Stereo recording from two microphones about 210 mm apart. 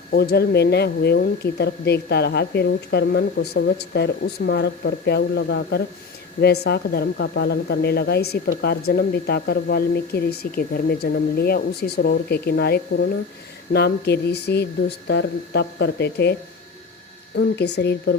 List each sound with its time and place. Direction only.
0.1 s speech: 50° left (ahead or behind)
17.3 s speech: 55° left (ahead or behind)